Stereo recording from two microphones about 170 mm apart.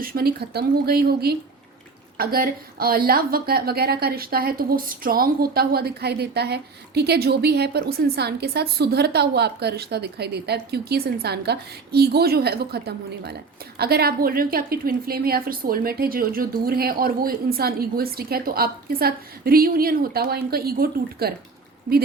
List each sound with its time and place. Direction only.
0.0 s a woman's voice: 60° right (ahead or behind)